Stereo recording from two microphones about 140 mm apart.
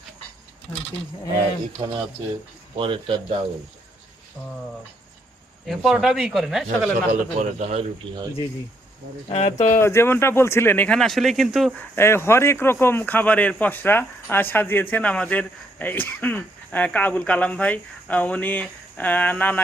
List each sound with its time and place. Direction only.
1.8 s speech: 35° right (ahead or behind)
5.6 s speech: centre (ahead or behind)
7.1 s a man's voice: 55° right (ahead or behind)
9.3 s speech: 55° left (ahead or behind)
9.8 s speech: 20° left (ahead or behind); by 11.7 s centre (ahead or behind)
11.8 s speech: 15° left (ahead or behind)